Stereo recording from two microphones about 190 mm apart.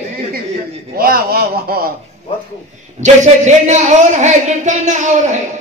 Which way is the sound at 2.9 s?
40° right (ahead or behind).